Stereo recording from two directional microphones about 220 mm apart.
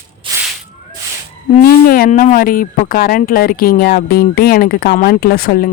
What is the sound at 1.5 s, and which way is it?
Speech, 40° left (ahead or behind).